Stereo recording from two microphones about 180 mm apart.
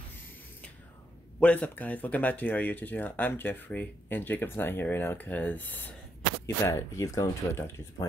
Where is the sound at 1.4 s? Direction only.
5° left (ahead or behind).